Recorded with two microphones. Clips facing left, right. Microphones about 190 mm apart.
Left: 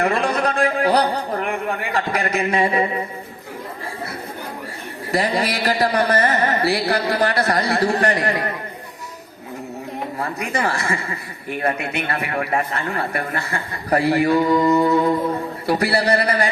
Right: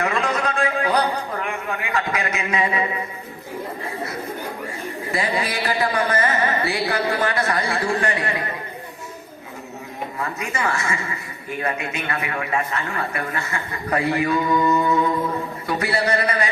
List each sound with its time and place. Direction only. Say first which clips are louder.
0.0 s a sound: left 3 dB; 35° left (ahead or behind)
5.1 s speech: left 4 dB; 40° left (ahead or behind)
10.2 s speech: left 3 dB; 35° left (ahead or behind)